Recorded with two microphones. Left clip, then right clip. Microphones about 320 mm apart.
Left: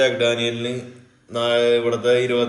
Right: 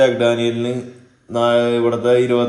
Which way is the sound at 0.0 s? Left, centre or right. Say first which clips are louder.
Right 4 dB; right.